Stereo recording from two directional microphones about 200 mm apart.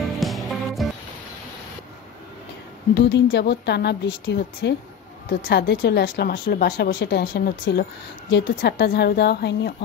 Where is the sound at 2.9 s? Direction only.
60° left (ahead or behind).